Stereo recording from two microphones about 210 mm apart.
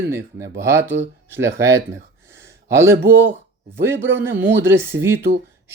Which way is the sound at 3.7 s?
10° right (ahead or behind).